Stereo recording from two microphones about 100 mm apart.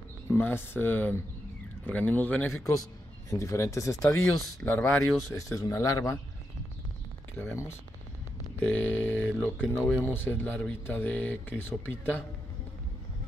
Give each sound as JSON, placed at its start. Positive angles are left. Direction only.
{"t": 0.3, "sound": "speech", "side_deg": 20}
{"t": 2.7, "sound": "speech", "side_deg": 35}
{"t": 5.3, "sound": "speech", "side_deg": 35}
{"t": 7.3, "sound": "speech", "side_deg": 25}